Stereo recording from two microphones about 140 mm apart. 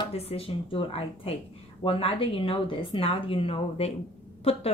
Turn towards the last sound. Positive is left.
turn(degrees=45)  # may be behind; listen again after turning